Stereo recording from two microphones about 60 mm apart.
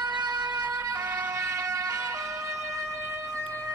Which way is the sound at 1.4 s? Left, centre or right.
Right.